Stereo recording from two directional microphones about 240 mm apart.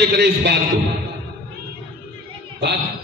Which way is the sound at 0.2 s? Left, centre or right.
Right.